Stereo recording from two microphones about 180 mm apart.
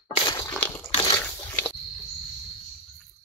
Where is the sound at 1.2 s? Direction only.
10° left (ahead or behind).